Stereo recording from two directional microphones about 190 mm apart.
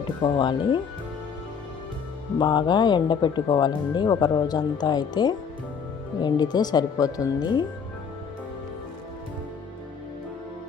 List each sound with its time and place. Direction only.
0.2 s speech: 25° left (ahead or behind)
2.4 s speech: 25° left (ahead or behind)